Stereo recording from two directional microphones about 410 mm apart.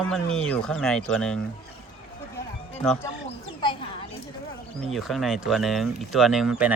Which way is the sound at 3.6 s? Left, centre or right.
Centre.